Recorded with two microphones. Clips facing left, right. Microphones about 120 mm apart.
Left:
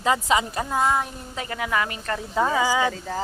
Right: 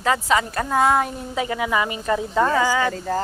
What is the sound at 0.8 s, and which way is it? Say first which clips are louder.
Speech: right 5 dB; 65° right (ahead or behind).